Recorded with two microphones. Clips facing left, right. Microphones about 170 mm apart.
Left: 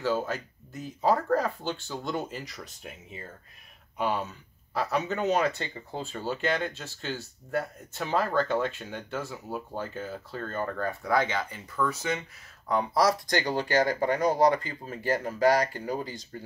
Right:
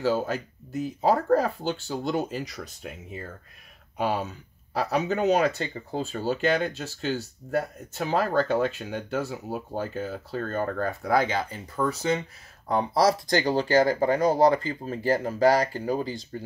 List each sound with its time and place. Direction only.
0.0 s speech: 35° right (ahead or behind)
4.0 s speech: 35° right (ahead or behind)